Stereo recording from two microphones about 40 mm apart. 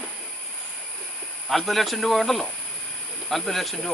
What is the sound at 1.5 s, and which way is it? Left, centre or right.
Speech, centre.